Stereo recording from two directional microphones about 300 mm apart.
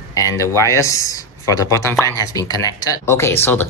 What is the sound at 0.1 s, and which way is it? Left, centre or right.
Speech, centre.